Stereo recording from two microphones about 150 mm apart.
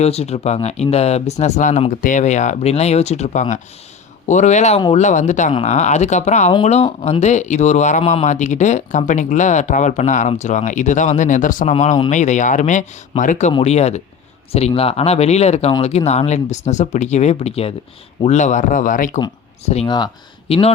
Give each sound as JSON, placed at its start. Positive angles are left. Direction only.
{"t": 0.0, "sound": "speech", "side_deg": 45}
{"t": 13.5, "sound": "speech", "side_deg": 40}
{"t": 19.6, "sound": "speech", "side_deg": 45}